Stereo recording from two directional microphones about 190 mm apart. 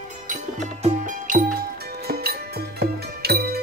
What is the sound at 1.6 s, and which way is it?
Music, 55° right (ahead or behind).